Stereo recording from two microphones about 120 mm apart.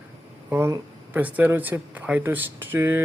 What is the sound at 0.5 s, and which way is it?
Speech, 20° right (ahead or behind).